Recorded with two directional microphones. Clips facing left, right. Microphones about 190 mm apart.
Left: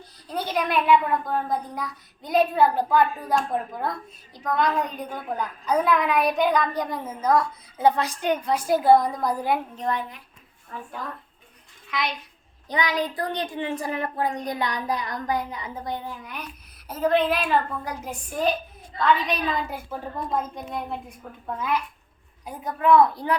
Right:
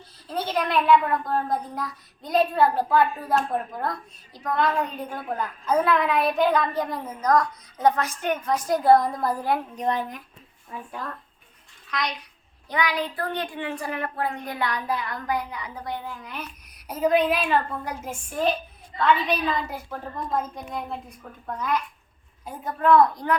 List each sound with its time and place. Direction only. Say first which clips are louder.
0.3 s a child's voice: even; centre (ahead or behind)
7.9 s a woman's voice: left 1 dB; 35° left (ahead or behind)
8.4 s a child's voice: even; 10° left (ahead or behind)
9.9 s speech: right 1 dB; 40° right (ahead or behind)
10.7 s a woman's voice: even; 10° right (ahead or behind)
12.6 s a woman's voice: left 1 dB; 20° left (ahead or behind)
16.9 s a woman's voice: right 1 dB; 10° right (ahead or behind)